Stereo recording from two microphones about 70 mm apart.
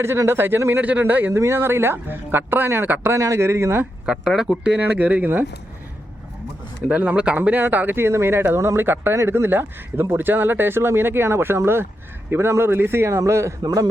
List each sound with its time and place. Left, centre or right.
0.3 s speech: right
0.8 s a man's voice: right
1.3 s speech: right
3.1 s speech: right
4.0 s speech: centre; by 5.5 s right
6.8 s speech: right